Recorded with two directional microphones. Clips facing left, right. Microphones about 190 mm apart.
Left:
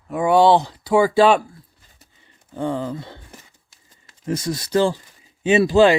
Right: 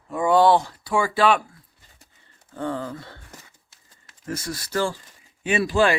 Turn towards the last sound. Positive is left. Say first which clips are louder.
# left 6 dB
turn(degrees=25)  # may be behind; listen again after turning